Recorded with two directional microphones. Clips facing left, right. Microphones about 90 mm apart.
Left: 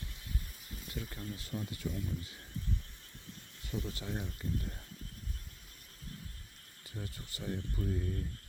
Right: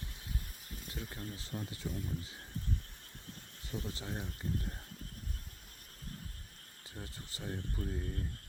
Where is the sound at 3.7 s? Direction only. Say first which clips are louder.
Left 2 dB; 30° right (ahead or behind).